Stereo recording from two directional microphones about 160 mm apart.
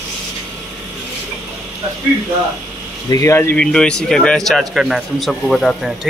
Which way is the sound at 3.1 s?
20° left (ahead or behind).